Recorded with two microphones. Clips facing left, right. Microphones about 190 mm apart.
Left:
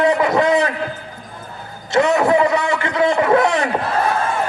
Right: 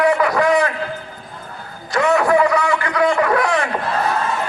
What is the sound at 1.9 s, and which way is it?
A man's voice, 20° left (ahead or behind).